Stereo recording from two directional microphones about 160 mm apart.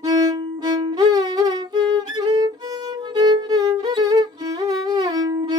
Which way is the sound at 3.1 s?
25° right (ahead or behind).